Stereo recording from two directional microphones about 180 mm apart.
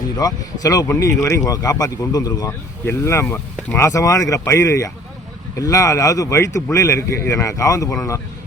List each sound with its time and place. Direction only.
0.2 s speech: 20° left (ahead or behind)